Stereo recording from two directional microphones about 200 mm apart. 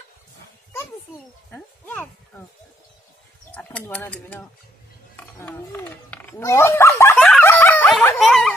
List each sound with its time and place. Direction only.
1.5 s a sound: 10° left (ahead or behind)
3.5 s speech: 10° left (ahead or behind)
7.2 s snicker: 10° left (ahead or behind)